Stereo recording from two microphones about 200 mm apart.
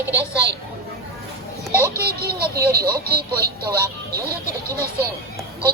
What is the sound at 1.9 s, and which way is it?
A child's voice, 50° right (ahead or behind).